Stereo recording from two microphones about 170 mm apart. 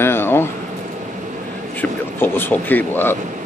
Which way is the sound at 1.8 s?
10° left (ahead or behind).